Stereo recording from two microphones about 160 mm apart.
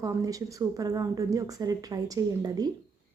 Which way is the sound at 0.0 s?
20° right (ahead or behind).